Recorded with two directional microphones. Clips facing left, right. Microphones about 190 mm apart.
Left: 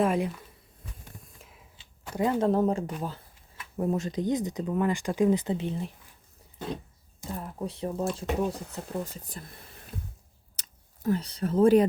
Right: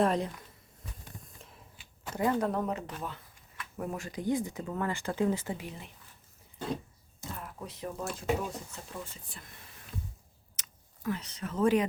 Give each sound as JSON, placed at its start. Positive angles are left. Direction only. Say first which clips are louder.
{"t": 0.0, "sound": "speech", "louder": "left 2 dB", "side_deg": 5}
{"t": 1.4, "sound": "printer", "louder": "even", "side_deg": 5}
{"t": 1.7, "sound": "a sound", "louder": "left 4 dB", "side_deg": 25}
{"t": 2.4, "sound": "speech", "louder": "left 7 dB", "side_deg": 30}
{"t": 7.3, "sound": "speech", "louder": "left 7 dB", "side_deg": 35}
{"t": 10.6, "sound": "speech", "louder": "left 5 dB", "side_deg": 35}